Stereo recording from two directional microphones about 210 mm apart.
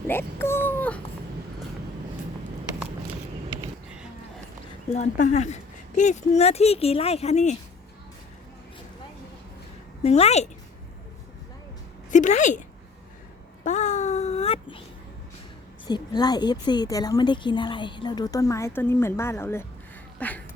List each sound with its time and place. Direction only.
0.1 s a child's voice: 10° left (ahead or behind)
4.9 s speech: 35° left (ahead or behind)
10.0 s speech: 30° left (ahead or behind)
12.1 s speech: 35° left (ahead or behind)
13.7 s a sound: 35° left (ahead or behind)
15.9 s speech: 20° left (ahead or behind)